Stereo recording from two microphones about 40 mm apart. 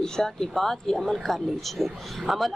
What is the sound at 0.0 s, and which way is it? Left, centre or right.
A man's voice, centre.